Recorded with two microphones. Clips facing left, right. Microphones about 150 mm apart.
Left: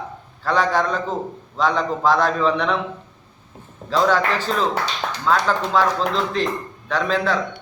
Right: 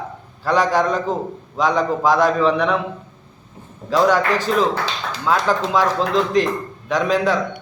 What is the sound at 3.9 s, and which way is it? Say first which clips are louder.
Speech: right 2 dB; 10° right (ahead or behind).